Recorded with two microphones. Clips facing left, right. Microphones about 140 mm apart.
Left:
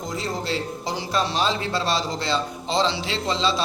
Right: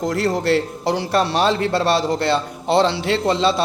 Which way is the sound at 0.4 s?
65° right (ahead or behind).